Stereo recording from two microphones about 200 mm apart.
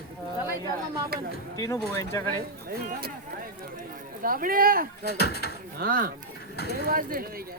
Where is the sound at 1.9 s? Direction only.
15° left (ahead or behind).